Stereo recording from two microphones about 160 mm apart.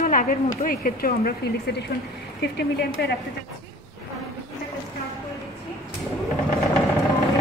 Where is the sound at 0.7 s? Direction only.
60° left (ahead or behind).